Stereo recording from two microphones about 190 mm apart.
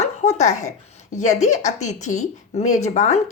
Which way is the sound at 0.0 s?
35° left (ahead or behind).